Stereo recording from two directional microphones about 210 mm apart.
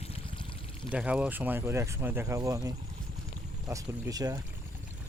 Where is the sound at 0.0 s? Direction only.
25° left (ahead or behind).